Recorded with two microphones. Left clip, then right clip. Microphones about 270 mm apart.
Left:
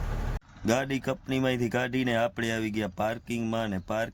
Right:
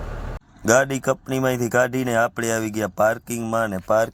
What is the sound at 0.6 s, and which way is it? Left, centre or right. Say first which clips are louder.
Speech: right 10 dB; centre.